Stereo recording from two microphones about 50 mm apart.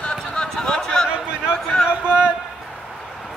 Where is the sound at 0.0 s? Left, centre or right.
Centre.